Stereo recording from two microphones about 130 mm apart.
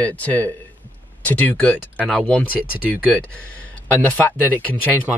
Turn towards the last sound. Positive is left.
turn(degrees=10)  # may be behind; listen again after turning